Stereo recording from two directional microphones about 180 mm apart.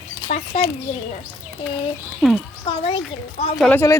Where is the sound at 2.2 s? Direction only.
Centre (ahead or behind).